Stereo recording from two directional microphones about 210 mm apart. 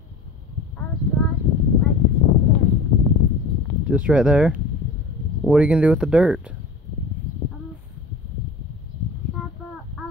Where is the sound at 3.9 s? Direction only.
5° right (ahead or behind).